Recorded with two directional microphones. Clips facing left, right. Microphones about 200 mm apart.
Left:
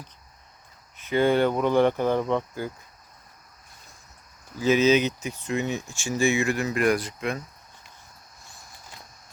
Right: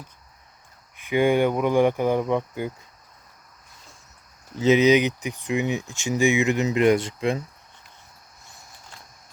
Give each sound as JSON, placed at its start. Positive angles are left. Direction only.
{"t": 0.9, "sound": "speech", "side_deg": -15}
{"t": 4.5, "sound": "speech", "side_deg": -20}